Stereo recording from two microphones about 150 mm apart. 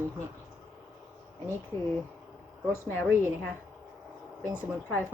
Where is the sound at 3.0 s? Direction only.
15° right (ahead or behind).